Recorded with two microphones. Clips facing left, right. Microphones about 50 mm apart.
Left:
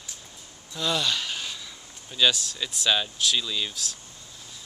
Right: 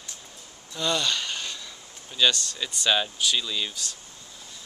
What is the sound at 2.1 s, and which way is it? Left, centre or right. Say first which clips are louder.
Speech: even; centre.